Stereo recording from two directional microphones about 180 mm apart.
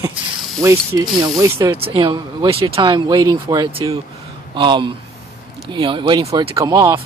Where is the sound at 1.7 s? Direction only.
30° right (ahead or behind).